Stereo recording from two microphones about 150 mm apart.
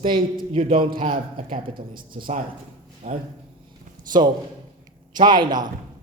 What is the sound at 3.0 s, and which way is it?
Speech, 45° right (ahead or behind).